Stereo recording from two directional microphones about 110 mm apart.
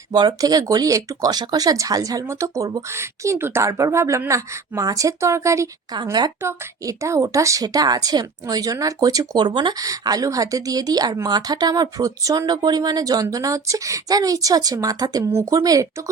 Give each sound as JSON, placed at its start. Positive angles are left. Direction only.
{"t": 0.1, "sound": "a woman's voice", "side_deg": -40}
{"t": 6.0, "sound": "speech", "side_deg": -40}
{"t": 6.4, "sound": "speech", "side_deg": -25}
{"t": 9.8, "sound": "a woman's voice", "side_deg": -35}